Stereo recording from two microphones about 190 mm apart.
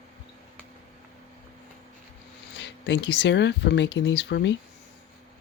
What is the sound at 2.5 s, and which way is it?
Speech, 70° left (ahead or behind).